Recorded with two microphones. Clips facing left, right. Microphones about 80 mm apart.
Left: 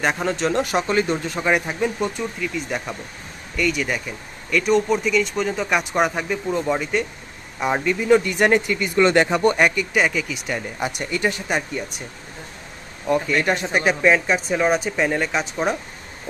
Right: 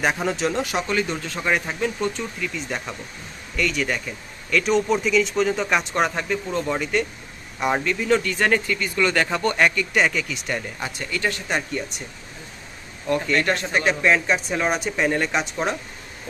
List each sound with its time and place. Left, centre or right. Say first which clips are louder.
0.0 s speech: left 1 dB; centre
0.9 s speech: left 4 dB; left
1.2 s speech: left 3 dB; centre
9.9 s speech: left 1 dB; centre
10.8 s speech: left 4 dB; centre
13.1 s speech: left 2 dB; centre